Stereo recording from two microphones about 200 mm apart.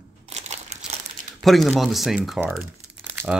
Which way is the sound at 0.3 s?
35° right (ahead or behind).